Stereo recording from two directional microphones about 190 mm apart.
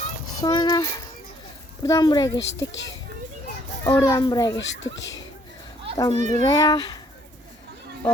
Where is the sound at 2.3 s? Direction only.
75° left (ahead or behind).